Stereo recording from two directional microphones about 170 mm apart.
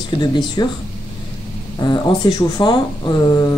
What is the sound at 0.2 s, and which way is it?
Speech, 25° left (ahead or behind).